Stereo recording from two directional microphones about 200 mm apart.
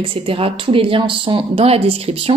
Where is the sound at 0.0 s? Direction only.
30° right (ahead or behind).